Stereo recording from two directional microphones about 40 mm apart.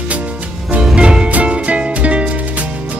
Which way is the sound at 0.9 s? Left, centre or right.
Right.